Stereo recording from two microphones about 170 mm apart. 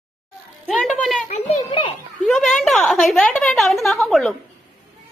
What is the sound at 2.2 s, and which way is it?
A woman's voice, centre (ahead or behind).